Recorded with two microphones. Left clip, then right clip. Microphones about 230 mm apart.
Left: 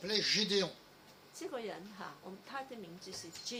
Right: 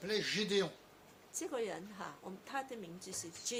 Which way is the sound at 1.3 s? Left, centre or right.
Right.